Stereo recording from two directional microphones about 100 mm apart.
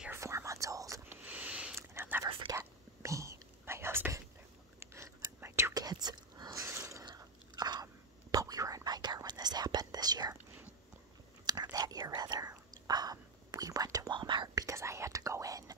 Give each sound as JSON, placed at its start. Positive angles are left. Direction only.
{"t": 0.1, "sound": "whispering", "side_deg": -30}
{"t": 1.0, "sound": "a sound", "side_deg": -15}
{"t": 1.8, "sound": "whispering", "side_deg": -25}
{"t": 5.8, "sound": "a sound", "side_deg": -40}
{"t": 7.1, "sound": "biting", "side_deg": -45}
{"t": 7.8, "sound": "whispering", "side_deg": -35}
{"t": 11.4, "sound": "whispering", "side_deg": -40}
{"t": 14.1, "sound": "whispering", "side_deg": -50}